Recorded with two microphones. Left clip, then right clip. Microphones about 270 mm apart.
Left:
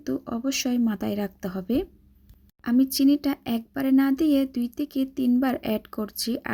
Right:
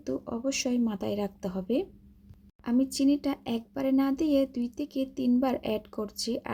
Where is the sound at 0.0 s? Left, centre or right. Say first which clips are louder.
Left 3 dB; left.